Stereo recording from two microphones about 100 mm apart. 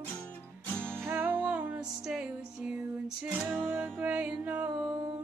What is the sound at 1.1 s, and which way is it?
Music, 20° right (ahead or behind).